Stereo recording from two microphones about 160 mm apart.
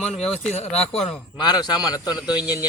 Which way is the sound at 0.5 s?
40° left (ahead or behind).